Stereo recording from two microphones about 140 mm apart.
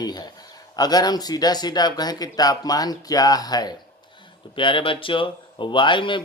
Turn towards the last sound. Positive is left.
turn(degrees=35)  # may be behind; listen again after turning